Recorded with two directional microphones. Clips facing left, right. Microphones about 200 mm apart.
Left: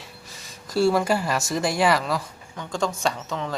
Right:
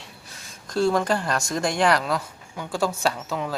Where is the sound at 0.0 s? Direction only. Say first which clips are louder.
Left 1 dB; centre (ahead or behind).